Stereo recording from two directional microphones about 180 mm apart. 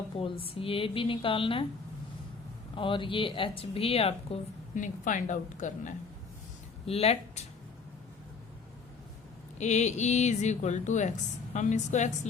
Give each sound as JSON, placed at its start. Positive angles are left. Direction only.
{"t": 0.2, "sound": "speech", "side_deg": 30}
{"t": 2.7, "sound": "speech", "side_deg": 30}
{"t": 4.7, "sound": "a woman's voice", "side_deg": 45}
{"t": 6.8, "sound": "speech", "side_deg": 35}
{"t": 9.6, "sound": "speech", "side_deg": 40}